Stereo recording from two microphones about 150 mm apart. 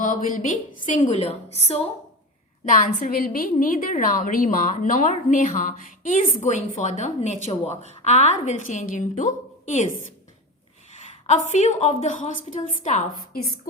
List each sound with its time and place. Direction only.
0.0 s a woman's voice: 60° left (ahead or behind)
2.6 s a woman's voice: 65° left (ahead or behind)
11.3 s a woman's voice: 50° left (ahead or behind)